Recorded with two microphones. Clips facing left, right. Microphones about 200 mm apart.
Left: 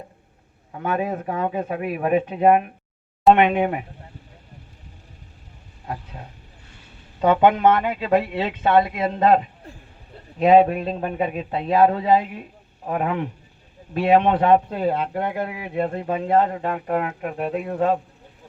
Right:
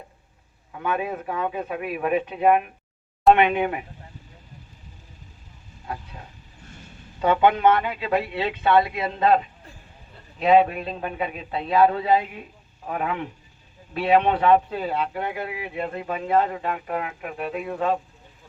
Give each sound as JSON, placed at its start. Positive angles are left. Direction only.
{"t": 0.7, "sound": "speech", "side_deg": 40}
{"t": 7.2, "sound": "speech", "side_deg": 45}
{"t": 10.4, "sound": "speech", "side_deg": 40}